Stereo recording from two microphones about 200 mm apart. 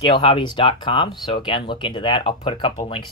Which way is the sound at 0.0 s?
25° left (ahead or behind).